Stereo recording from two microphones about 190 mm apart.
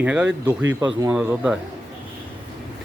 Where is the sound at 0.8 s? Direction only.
20° right (ahead or behind).